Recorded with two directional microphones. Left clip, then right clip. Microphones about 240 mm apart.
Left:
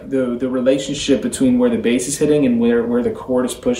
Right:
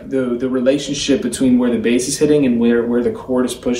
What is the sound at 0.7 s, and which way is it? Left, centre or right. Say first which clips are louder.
Speech: left 1 dB; centre.